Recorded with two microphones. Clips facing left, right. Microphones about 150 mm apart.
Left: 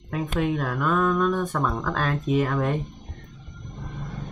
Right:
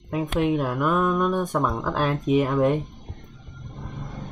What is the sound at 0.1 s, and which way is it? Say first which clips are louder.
Speech: right 3 dB; 15° right (ahead or behind).